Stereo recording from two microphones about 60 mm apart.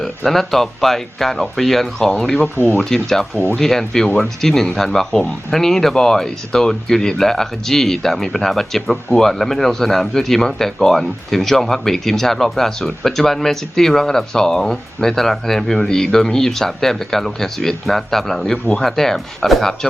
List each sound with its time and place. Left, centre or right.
0.3 s speech: centre
2.4 s speech: left
2.9 s speech: centre
3.3 s speech: left
3.6 s speech: centre